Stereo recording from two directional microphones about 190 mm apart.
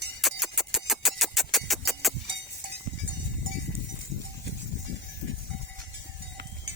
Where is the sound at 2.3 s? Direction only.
70° right (ahead or behind).